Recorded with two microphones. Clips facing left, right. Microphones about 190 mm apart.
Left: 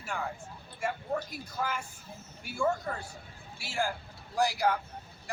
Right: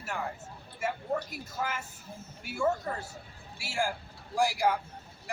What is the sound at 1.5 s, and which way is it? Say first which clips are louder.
Speech: left 1 dB; 5° right (ahead or behind).